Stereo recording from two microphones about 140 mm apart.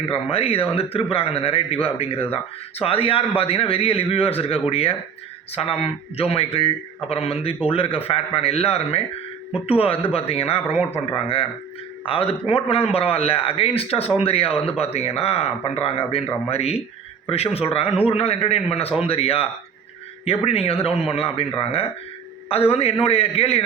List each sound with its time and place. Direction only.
0.1 s a man's voice: 45° left (ahead or behind)
12.0 s a man's voice: 40° left (ahead or behind)